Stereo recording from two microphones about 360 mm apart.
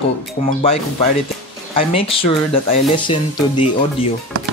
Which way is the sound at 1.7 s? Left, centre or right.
Centre.